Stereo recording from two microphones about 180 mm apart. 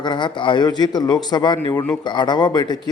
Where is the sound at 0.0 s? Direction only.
25° left (ahead or behind).